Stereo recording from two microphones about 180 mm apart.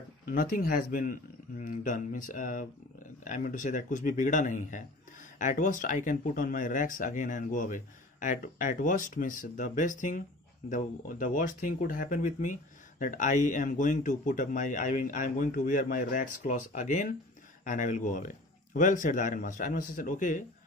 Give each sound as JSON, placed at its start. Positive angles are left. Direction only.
{"t": 0.3, "sound": "speech", "side_deg": 50}